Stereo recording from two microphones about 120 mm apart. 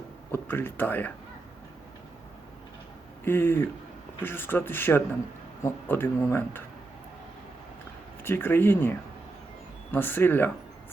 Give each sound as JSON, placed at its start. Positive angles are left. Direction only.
{"t": 0.3, "sound": "speech", "side_deg": 15}
{"t": 3.2, "sound": "speech", "side_deg": 15}
{"t": 8.2, "sound": "speech", "side_deg": 20}